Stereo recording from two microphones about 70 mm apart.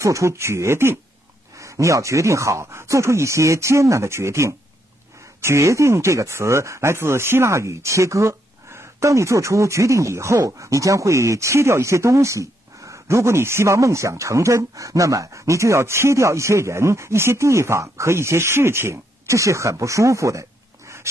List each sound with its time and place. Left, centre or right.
0.0 s speech: right
1.6 s speech: right